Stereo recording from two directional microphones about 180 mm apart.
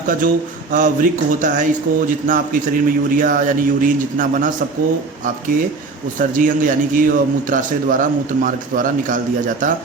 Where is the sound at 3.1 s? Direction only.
50° right (ahead or behind).